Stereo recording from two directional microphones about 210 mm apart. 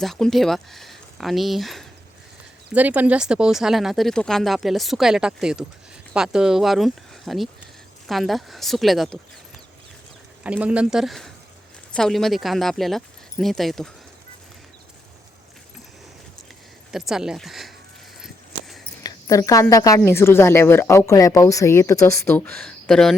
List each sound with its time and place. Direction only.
0.0 s speech: centre (ahead or behind)
10.4 s speech: 5° right (ahead or behind)
16.9 s speech: centre (ahead or behind)
19.0 s a woman's voice: 15° left (ahead or behind)